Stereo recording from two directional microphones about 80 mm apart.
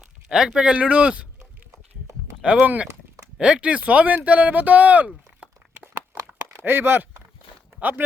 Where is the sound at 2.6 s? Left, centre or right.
Right.